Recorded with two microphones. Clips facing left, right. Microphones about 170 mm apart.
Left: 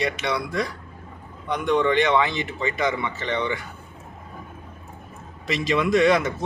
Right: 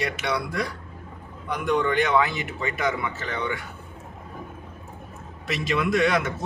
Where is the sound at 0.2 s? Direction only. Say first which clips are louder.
Left 2 dB; 5° right (ahead or behind).